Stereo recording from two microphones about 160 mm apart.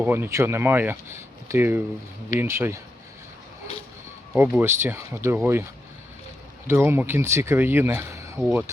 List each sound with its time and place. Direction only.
0.0 s speech: 15° right (ahead or behind)
4.4 s speech: 15° right (ahead or behind)
6.7 s speech: 15° right (ahead or behind)